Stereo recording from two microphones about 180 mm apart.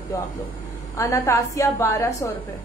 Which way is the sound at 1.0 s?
15° left (ahead or behind).